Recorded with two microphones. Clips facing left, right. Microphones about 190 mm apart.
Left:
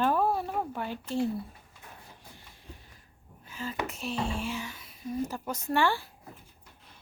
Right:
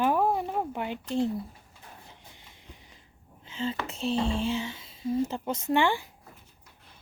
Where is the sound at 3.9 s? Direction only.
30° right (ahead or behind).